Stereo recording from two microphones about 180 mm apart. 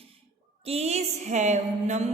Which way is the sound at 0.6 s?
35° right (ahead or behind).